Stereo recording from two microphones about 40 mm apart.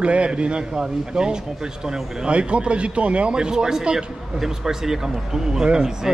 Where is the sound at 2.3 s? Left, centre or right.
Right.